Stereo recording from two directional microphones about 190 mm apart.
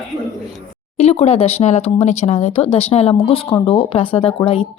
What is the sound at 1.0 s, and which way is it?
A woman's voice, 35° left (ahead or behind).